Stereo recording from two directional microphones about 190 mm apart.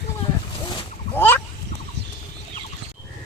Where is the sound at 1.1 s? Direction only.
10° left (ahead or behind).